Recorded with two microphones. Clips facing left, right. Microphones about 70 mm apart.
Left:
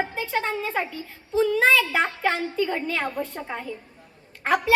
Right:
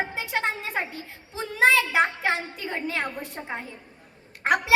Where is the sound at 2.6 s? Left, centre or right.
Centre.